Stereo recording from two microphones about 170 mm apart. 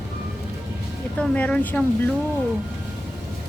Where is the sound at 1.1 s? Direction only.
10° left (ahead or behind).